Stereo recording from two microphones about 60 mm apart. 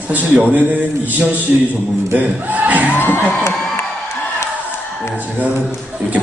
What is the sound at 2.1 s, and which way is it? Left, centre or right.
Speech, right.